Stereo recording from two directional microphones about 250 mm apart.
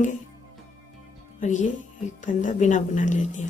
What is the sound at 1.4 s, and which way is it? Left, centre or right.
Speech, left.